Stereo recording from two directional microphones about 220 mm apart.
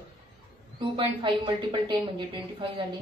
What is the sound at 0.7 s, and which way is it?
Speech, 25° right (ahead or behind).